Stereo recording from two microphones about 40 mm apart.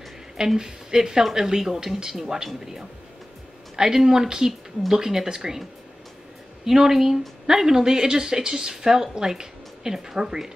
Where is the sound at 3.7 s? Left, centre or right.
Centre.